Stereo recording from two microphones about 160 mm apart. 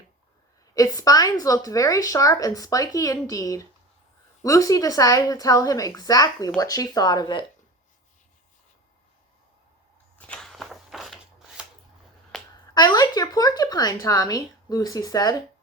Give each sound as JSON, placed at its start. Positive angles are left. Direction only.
{"t": 0.7, "sound": "speech", "side_deg": 20}
{"t": 10.2, "sound": "walk", "side_deg": 5}
{"t": 12.3, "sound": "a sound", "side_deg": 0}
{"t": 12.7, "sound": "speech", "side_deg": 25}